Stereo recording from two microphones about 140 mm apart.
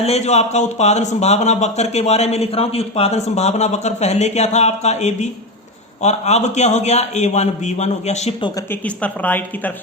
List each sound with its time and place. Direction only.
0.0 s speech: 50° left (ahead or behind)
9.0 s speech: 10° left (ahead or behind)